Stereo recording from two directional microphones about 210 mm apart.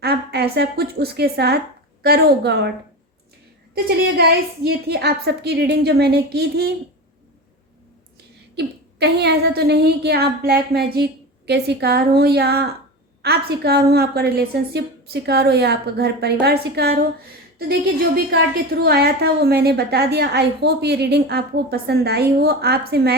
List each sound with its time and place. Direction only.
0.0 s a woman's voice: 50° right (ahead or behind)
3.8 s a woman's voice: 50° right (ahead or behind)
8.5 s a woman's voice: 50° right (ahead or behind)